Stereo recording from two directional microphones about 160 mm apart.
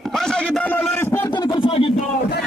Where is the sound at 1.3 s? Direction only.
30° left (ahead or behind).